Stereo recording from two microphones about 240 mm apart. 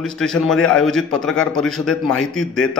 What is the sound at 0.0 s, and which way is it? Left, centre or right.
A man's voice, centre.